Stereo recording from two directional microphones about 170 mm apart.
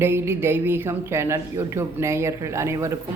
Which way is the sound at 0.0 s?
15° right (ahead or behind).